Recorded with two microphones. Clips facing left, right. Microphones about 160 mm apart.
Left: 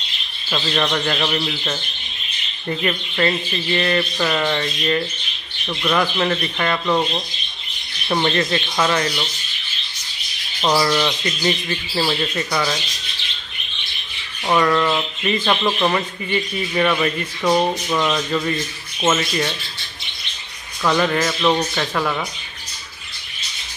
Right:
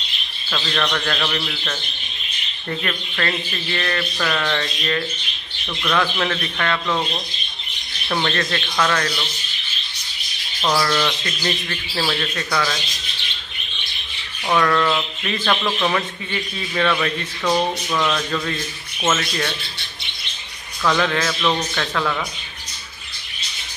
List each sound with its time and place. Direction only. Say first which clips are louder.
0.5 s speech: left 2 dB; 15° left (ahead or behind)
8.1 s speech: left 3 dB; 15° left (ahead or behind)
10.6 s speech: left 2 dB; 15° left (ahead or behind)
14.5 s speech: left 1 dB; 10° left (ahead or behind)
20.8 s speech: left 2 dB; 10° left (ahead or behind)